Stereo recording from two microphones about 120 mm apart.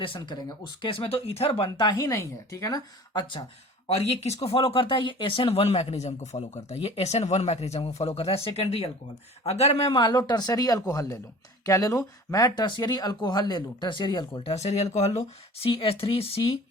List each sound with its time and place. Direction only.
0.0 s speech: 40° left (ahead or behind)
3.8 s speech: 60° left (ahead or behind); by 14.5 s 40° left (ahead or behind)
14.5 s speech: 65° left (ahead or behind)